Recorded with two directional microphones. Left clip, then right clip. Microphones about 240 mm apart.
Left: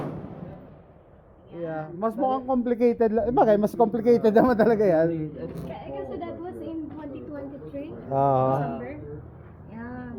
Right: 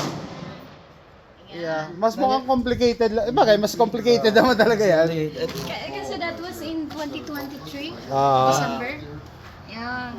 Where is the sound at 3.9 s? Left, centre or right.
Centre.